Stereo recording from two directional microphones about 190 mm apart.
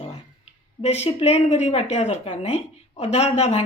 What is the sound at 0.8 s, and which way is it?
Speech, 35° left (ahead or behind).